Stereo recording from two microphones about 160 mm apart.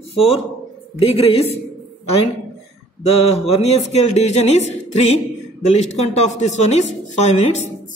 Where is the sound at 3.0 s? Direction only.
40° left (ahead or behind).